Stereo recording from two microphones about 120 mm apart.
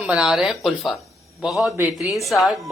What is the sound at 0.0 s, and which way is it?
Speech, 5° right (ahead or behind).